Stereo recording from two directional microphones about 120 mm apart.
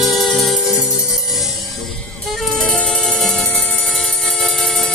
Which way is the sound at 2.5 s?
5° left (ahead or behind).